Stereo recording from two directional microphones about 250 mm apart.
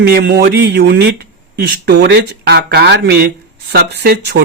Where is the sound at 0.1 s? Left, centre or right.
Right.